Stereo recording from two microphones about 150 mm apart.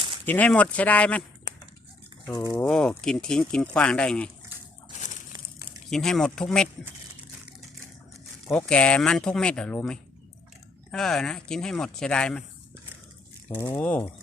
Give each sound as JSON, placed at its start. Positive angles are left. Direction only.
{"t": 0.3, "sound": "speech", "side_deg": 10}
{"t": 2.3, "sound": "speech", "side_deg": 25}
{"t": 2.6, "sound": "speech", "side_deg": 5}
{"t": 5.6, "sound": "speech", "side_deg": 5}
{"t": 8.4, "sound": "speech", "side_deg": 5}
{"t": 13.7, "sound": "speech", "side_deg": 10}